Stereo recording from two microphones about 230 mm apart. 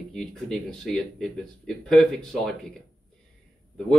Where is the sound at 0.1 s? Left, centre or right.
Centre.